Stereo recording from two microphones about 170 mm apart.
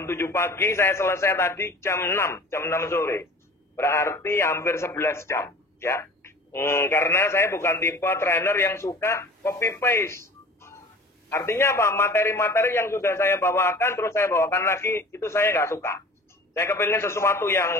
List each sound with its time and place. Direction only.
0.0 s a man's voice: 15° left (ahead or behind)